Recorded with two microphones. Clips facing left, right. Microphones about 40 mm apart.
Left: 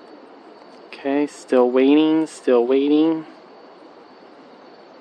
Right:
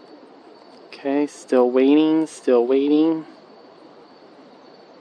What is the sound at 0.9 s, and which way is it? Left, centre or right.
Speech, left.